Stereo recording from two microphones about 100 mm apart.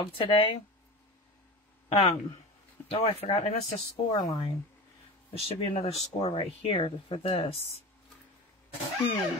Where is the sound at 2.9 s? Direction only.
75° left (ahead or behind).